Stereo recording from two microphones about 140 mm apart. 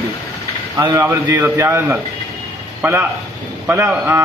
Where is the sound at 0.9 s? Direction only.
15° right (ahead or behind).